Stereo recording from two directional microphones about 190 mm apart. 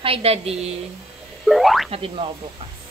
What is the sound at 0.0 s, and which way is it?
Speech, 30° right (ahead or behind).